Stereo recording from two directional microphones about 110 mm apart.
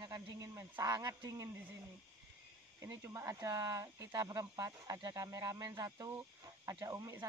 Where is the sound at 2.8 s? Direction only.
25° right (ahead or behind).